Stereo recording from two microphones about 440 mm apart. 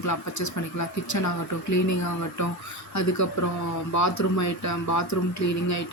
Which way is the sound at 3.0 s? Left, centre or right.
Left.